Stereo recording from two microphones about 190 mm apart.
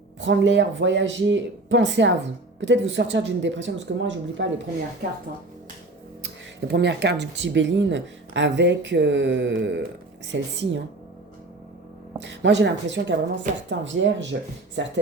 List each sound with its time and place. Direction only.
0.2 s speech: 75° right (ahead or behind)
6.2 s speech: 60° right (ahead or behind)
12.2 s speech: 65° right (ahead or behind)